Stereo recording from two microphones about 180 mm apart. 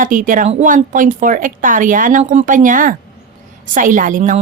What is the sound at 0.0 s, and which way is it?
A woman's voice, 50° right (ahead or behind).